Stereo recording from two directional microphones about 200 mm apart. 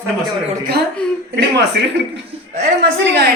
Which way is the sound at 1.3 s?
55° right (ahead or behind).